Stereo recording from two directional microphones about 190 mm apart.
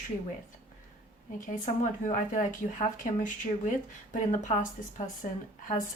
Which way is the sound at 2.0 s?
40° left (ahead or behind).